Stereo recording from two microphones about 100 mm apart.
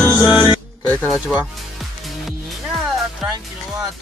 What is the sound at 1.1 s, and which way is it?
Music, centre (ahead or behind).